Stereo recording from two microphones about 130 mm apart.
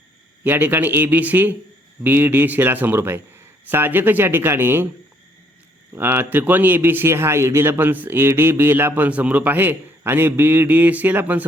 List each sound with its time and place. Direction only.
0.4 s a man's voice: 15° right (ahead or behind)
5.9 s a man's voice: 15° right (ahead or behind)